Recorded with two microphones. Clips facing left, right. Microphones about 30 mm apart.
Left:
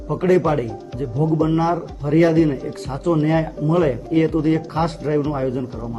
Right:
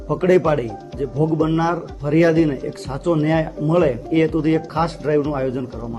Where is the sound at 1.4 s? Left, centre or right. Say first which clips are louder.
Even; right.